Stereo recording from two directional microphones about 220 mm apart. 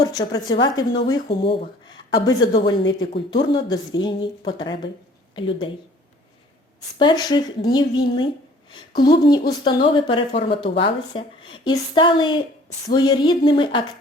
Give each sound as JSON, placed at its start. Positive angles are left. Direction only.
{"t": 0.0, "sound": "speech", "side_deg": 20}
{"t": 7.0, "sound": "speech", "side_deg": 20}